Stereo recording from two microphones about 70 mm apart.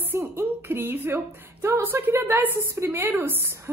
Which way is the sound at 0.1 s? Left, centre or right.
Right.